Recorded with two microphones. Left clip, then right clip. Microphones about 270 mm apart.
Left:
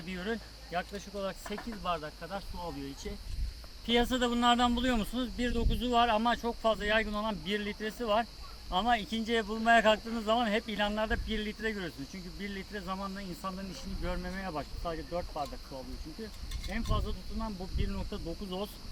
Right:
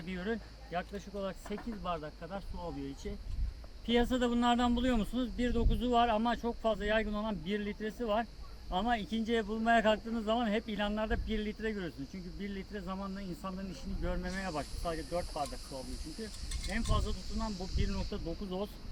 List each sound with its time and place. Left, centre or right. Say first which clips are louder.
0.0 s a man's voice: left 1 dB; centre
3.8 s a man's voice: left 2 dB; centre
16.6 s a man's voice: even; centre